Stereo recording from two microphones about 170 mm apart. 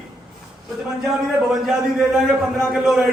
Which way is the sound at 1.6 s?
5° right (ahead or behind).